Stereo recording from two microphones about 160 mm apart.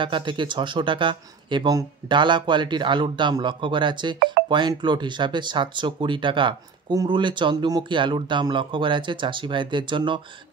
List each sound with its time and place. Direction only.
0.0 s speech: 30° right (ahead or behind)